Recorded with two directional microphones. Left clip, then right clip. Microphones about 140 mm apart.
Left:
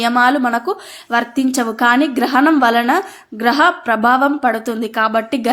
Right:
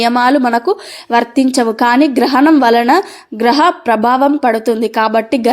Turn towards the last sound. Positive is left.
turn(degrees=-25)  # may be behind; listen again after turning